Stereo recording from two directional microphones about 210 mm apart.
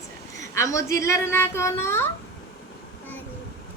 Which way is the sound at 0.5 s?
15° left (ahead or behind).